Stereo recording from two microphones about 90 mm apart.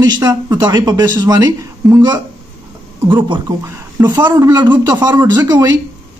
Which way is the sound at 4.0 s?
55° right (ahead or behind).